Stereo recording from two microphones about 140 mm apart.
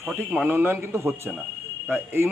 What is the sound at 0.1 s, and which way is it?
A man's voice, 10° right (ahead or behind).